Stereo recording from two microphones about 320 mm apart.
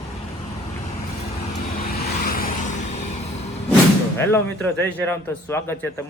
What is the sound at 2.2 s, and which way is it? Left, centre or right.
Vehicle, left.